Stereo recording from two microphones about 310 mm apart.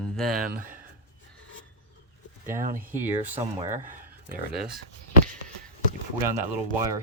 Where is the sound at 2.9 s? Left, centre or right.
Centre.